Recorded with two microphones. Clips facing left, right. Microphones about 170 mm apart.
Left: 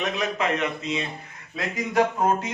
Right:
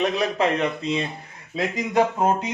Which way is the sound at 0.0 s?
35° right (ahead or behind).